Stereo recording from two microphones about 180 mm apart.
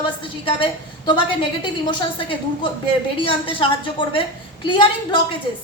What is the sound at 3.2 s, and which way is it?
A woman's voice, 30° left (ahead or behind).